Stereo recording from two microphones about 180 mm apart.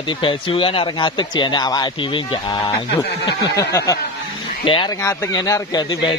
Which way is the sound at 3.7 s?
20° left (ahead or behind).